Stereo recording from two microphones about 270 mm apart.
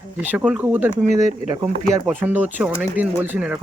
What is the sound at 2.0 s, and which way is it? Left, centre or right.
Speech, centre.